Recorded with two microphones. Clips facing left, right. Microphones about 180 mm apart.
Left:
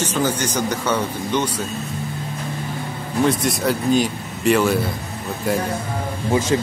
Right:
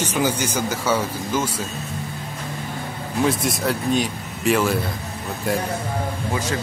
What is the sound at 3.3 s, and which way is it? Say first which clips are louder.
Speech: left 2 dB; centre (ahead or behind).